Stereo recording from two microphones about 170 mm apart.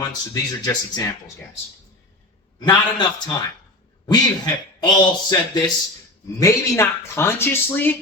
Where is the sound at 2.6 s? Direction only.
25° left (ahead or behind).